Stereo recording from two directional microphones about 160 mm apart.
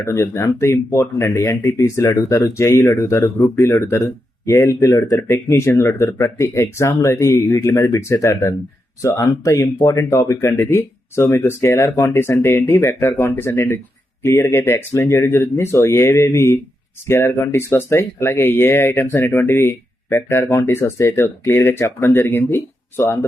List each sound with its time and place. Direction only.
0.0 s speech: 20° left (ahead or behind)